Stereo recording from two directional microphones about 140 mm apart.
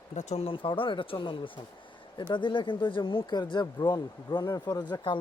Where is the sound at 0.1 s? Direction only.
55° left (ahead or behind).